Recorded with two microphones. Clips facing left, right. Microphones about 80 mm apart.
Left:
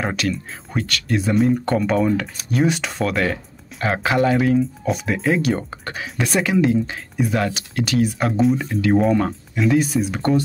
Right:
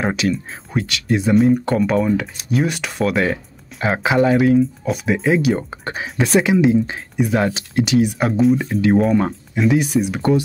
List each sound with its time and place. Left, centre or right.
0.0 s speech: centre
1.3 s speech: centre
5.9 s speech: right
8.2 s speech: centre